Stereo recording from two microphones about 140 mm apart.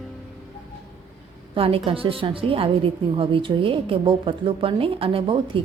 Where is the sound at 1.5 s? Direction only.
40° right (ahead or behind).